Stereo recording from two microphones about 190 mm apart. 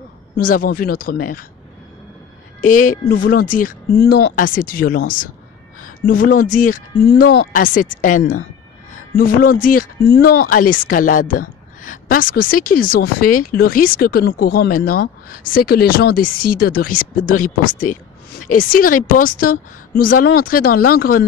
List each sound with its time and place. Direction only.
0.4 s speech: 50° left (ahead or behind)
2.6 s speech: 45° left (ahead or behind)